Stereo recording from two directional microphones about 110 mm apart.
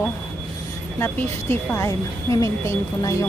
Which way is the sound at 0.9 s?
20° left (ahead or behind).